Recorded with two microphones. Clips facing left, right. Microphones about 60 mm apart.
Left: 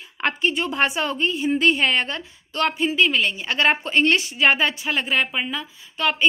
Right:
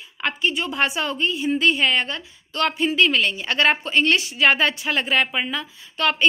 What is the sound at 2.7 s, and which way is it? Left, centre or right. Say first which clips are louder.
A woman's voice: right 2 dB; centre.